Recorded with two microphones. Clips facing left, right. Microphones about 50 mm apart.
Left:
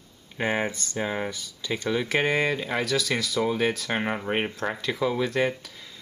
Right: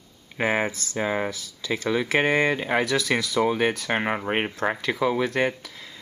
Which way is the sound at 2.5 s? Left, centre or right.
Right.